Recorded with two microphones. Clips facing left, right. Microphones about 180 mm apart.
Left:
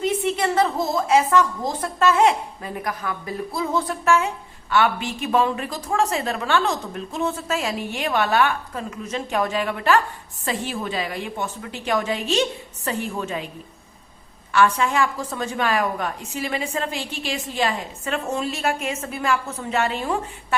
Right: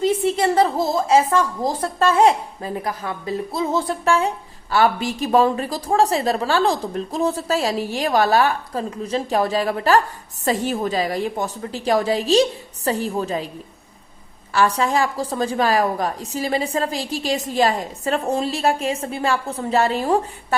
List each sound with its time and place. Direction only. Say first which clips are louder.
0.0 s a woman's voice: right 4 dB; 30° right (ahead or behind)
14.5 s a woman's voice: right 1 dB; 35° right (ahead or behind)